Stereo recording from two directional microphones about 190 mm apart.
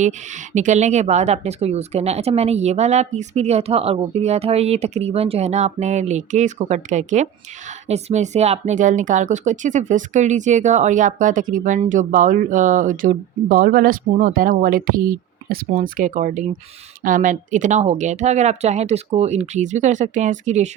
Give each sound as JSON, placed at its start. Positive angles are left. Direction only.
{"t": 0.5, "sound": "speech", "side_deg": -40}